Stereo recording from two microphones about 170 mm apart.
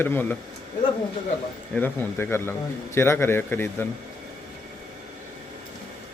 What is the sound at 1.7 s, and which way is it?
Speech, 10° left (ahead or behind).